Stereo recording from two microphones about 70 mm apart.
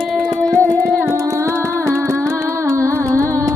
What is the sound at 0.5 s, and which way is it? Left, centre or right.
Music, right.